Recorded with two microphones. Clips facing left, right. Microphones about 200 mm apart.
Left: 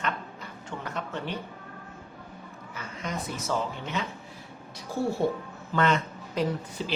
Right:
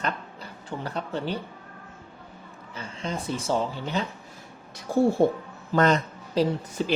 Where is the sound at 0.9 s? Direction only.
35° right (ahead or behind).